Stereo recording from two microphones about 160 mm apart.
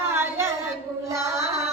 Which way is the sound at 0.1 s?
15° right (ahead or behind).